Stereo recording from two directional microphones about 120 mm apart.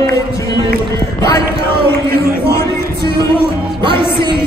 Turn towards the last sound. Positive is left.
turn(degrees=-45)  # may be behind; listen again after turning